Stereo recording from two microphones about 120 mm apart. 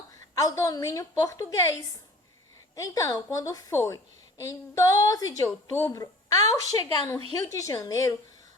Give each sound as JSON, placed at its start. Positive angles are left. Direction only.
{"t": 0.3, "sound": "a woman's voice", "side_deg": 30}